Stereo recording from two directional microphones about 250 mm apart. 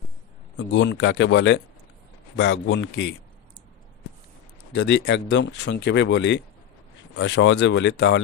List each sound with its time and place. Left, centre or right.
0.6 s speech: left
4.7 s speech: left